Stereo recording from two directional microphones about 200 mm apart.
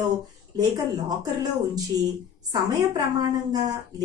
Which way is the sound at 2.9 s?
20° right (ahead or behind).